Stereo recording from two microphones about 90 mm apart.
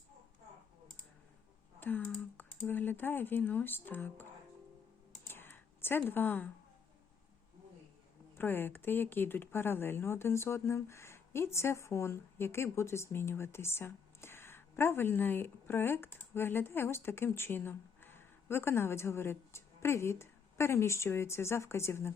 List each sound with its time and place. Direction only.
2.1 s speech: 20° left (ahead or behind)
5.3 s computer keyboard: 25° left (ahead or behind)
6.1 s speech: 20° left (ahead or behind)
8.4 s speech: 25° left (ahead or behind)